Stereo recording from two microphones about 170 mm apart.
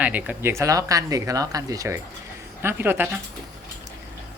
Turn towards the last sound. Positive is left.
turn(degrees=-10)  # may be behind; listen again after turning